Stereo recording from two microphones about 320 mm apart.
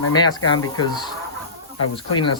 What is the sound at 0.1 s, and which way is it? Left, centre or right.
Speech, centre.